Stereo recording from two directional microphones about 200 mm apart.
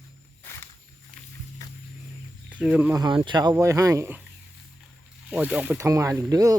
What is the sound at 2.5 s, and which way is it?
Speech, 5° right (ahead or behind).